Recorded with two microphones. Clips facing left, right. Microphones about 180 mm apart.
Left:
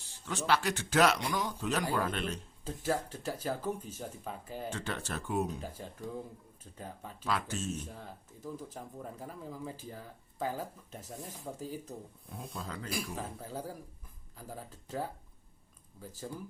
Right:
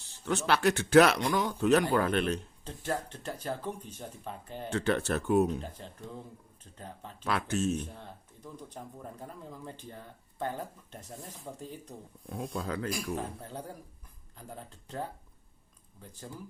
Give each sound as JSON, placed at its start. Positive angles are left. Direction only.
{"t": 0.3, "sound": "speech", "side_deg": -60}
{"t": 2.6, "sound": "speech", "side_deg": 5}
{"t": 4.7, "sound": "speech", "side_deg": -65}
{"t": 5.6, "sound": "speech", "side_deg": 10}
{"t": 7.3, "sound": "speech", "side_deg": -65}
{"t": 7.9, "sound": "speech", "side_deg": 5}
{"t": 12.3, "sound": "speech", "side_deg": -60}
{"t": 12.9, "sound": "speech", "side_deg": 0}